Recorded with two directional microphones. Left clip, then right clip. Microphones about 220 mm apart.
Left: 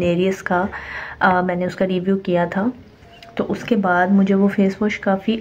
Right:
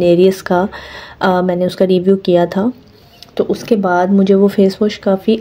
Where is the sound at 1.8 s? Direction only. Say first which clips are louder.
Right 9 dB; 55° right (ahead or behind).